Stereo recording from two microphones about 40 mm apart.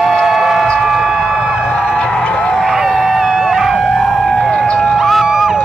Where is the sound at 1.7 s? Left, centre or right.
Left.